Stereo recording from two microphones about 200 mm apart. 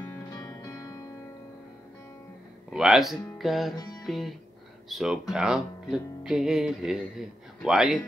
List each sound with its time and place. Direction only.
0.0 s music: 15° left (ahead or behind)
2.7 s speech: centre (ahead or behind)
3.7 s music: 20° left (ahead or behind)
4.0 s music: centre (ahead or behind)
4.8 s speech: centre (ahead or behind)